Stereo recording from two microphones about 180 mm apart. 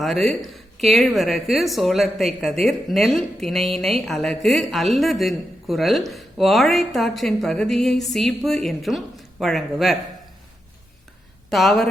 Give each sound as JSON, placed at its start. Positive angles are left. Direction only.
{"t": 0.0, "sound": "speech", "side_deg": 0}
{"t": 11.5, "sound": "speech", "side_deg": 0}